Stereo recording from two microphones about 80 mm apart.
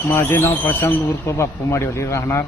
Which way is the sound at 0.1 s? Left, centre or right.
Left.